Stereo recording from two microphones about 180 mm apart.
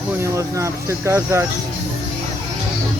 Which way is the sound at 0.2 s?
15° right (ahead or behind).